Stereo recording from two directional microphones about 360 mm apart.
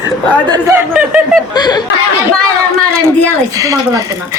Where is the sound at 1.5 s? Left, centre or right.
Centre.